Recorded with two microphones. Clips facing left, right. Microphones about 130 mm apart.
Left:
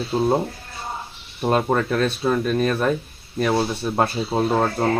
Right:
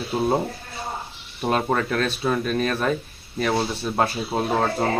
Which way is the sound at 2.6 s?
Centre (ahead or behind).